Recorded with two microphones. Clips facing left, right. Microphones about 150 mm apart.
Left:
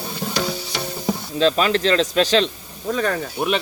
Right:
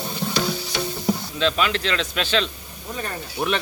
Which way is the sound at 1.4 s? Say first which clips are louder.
Left 8 dB; 40° left (ahead or behind).